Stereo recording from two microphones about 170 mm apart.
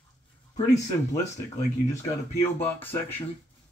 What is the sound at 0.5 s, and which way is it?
Speech, 20° left (ahead or behind).